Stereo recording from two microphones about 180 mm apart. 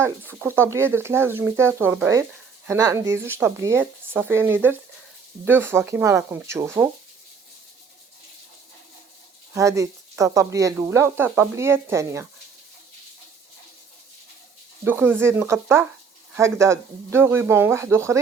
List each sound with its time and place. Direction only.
0.3 s speech: 15° right (ahead or behind)
9.5 s speech: 15° right (ahead or behind)
14.8 s speech: 10° right (ahead or behind)